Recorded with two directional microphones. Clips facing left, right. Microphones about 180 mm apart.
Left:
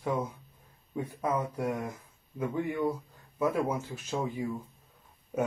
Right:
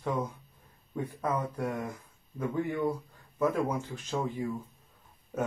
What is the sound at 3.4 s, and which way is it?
Speech, 5° left (ahead or behind).